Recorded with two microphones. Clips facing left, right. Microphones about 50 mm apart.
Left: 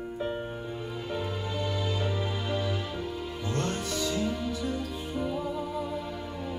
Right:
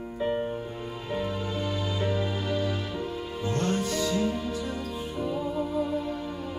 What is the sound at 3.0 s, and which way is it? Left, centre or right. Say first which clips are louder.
Music: right 2 dB; right.